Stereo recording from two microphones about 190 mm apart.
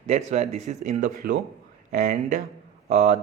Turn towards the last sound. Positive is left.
turn(degrees=-35)  # may be behind; listen again after turning